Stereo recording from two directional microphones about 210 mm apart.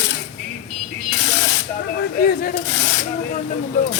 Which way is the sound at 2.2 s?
45° left (ahead or behind).